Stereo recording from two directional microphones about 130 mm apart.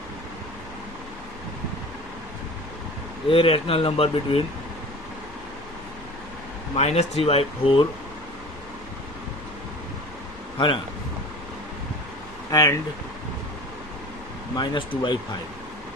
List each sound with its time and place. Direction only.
3.2 s speech: 45° left (ahead or behind)
6.7 s speech: 55° left (ahead or behind)
12.5 s speech: 25° left (ahead or behind)
14.5 s speech: 35° left (ahead or behind)